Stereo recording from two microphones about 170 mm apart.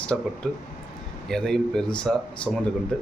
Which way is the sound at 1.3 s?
5° left (ahead or behind).